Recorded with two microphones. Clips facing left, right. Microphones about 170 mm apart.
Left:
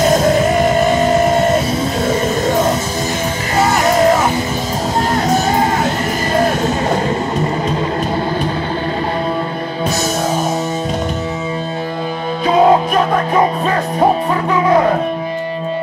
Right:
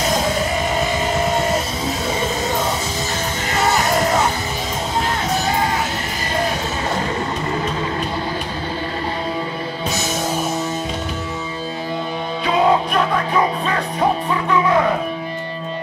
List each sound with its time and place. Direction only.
12.4 s music: 40° left (ahead or behind)